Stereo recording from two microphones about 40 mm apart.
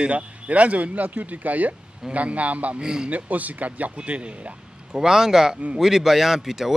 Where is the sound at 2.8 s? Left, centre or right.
Centre.